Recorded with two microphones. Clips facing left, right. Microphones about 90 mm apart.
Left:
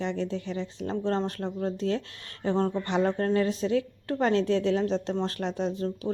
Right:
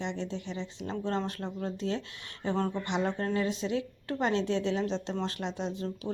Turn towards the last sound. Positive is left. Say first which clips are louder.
# left 5 dB
turn(degrees=35)  # may be behind; listen again after turning